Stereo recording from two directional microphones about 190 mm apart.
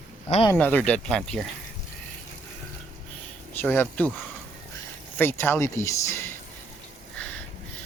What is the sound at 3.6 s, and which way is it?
Speech, 10° left (ahead or behind).